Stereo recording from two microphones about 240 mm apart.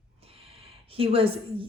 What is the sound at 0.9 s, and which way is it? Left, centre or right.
Speech, right.